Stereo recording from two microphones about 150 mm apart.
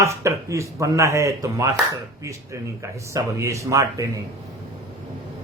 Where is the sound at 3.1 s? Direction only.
20° right (ahead or behind).